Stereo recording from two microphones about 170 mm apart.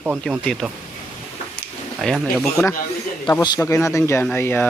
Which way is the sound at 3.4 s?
20° left (ahead or behind).